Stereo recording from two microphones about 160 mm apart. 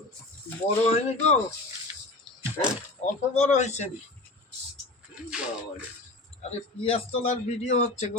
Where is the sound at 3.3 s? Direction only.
45° left (ahead or behind).